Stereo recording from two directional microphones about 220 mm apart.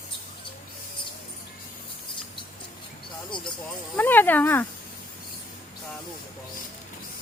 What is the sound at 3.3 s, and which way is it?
Speech, 20° left (ahead or behind).